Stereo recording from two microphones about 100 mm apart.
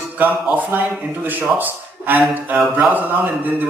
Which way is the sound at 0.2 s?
15° right (ahead or behind).